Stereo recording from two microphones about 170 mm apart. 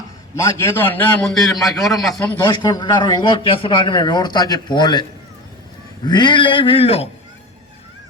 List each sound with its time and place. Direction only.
0.3 s a man's voice: 15° left (ahead or behind)
1.5 s a man's voice: centre (ahead or behind)
2.1 s a man's voice: 25° left (ahead or behind)
6.1 s a man's voice: 25° left (ahead or behind)